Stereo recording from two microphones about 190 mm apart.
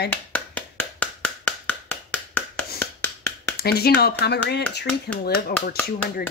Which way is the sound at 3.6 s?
55° left (ahead or behind).